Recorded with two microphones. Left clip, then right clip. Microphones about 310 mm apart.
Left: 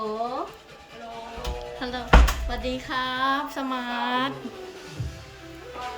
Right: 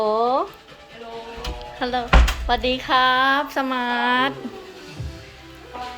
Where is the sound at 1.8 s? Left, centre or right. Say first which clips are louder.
Right 2 dB; centre.